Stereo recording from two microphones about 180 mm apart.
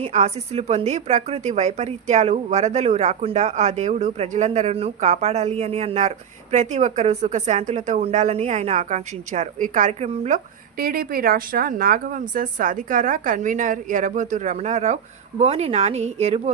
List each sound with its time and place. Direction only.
0.0 s a woman's voice: 40° right (ahead or behind)